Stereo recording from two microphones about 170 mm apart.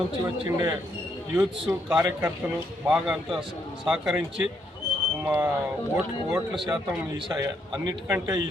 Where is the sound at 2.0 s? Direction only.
15° right (ahead or behind).